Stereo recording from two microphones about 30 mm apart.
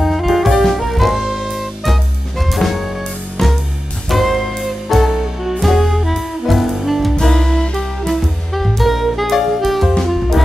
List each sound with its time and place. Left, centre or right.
0.0 s music: centre
4.1 s music: centre
7.3 s music: centre
8.1 s music: centre